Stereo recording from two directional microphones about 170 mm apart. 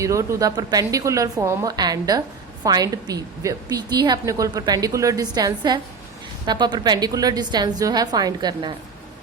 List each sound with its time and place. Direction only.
0.0 s a woman's voice: 15° right (ahead or behind)